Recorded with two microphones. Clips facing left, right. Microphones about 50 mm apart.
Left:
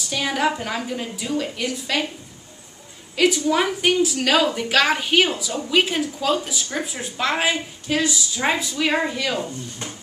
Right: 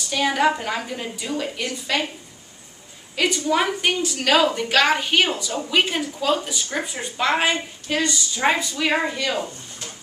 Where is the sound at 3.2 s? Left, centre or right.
Centre.